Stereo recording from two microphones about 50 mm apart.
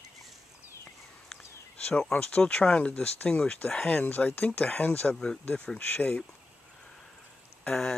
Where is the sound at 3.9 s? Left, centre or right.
Left.